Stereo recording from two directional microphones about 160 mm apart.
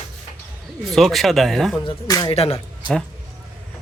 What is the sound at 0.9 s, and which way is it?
Speech, centre (ahead or behind).